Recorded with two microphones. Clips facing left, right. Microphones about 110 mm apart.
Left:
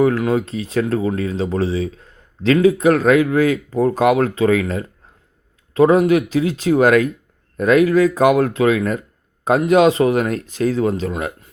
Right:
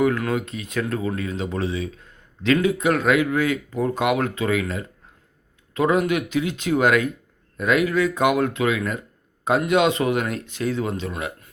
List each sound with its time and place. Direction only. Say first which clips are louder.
0.3 s speech: left 6 dB; 35° left (ahead or behind)
5.7 s speech: left 7 dB; 35° left (ahead or behind)